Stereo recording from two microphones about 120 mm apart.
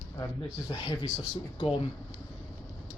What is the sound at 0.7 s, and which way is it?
Speech, 40° left (ahead or behind).